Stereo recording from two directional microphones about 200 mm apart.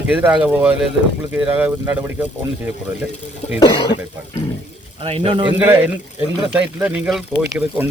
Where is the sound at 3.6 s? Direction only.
20° left (ahead or behind).